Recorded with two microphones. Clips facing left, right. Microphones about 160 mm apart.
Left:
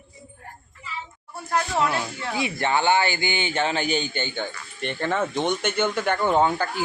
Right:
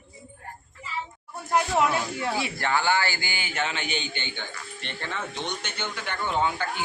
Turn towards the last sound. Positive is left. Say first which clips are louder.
# left 5 dB
turn(degrees=40)  # may be behind; listen again after turning